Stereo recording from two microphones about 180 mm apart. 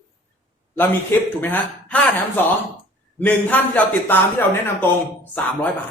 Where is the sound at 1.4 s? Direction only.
10° left (ahead or behind).